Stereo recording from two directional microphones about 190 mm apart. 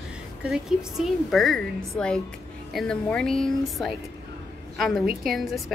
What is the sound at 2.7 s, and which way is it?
A woman's voice, 5° left (ahead or behind).